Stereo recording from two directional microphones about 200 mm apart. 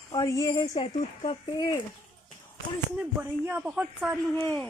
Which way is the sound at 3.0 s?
5° right (ahead or behind).